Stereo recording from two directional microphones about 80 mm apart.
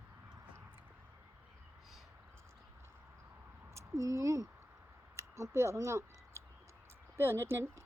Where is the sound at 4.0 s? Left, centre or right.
Right.